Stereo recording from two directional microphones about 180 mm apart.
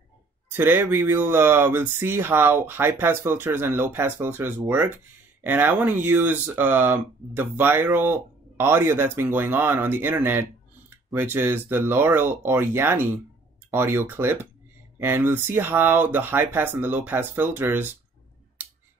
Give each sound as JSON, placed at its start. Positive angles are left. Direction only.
{"t": 0.5, "sound": "speech", "side_deg": -10}